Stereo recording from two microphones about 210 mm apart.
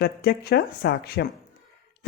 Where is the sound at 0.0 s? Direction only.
50° left (ahead or behind).